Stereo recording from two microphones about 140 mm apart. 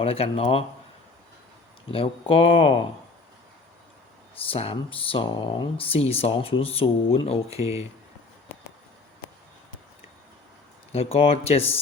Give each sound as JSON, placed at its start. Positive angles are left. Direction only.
{"t": 0.0, "sound": "speech", "side_deg": 45}
{"t": 1.9, "sound": "speech", "side_deg": 40}
{"t": 4.5, "sound": "speech", "side_deg": 40}
{"t": 10.9, "sound": "speech", "side_deg": 45}